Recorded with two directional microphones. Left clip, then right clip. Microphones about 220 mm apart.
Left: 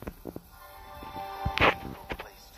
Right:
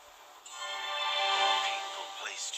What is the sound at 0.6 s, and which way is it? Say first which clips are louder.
Music: right 11 dB; 55° right (ahead or behind).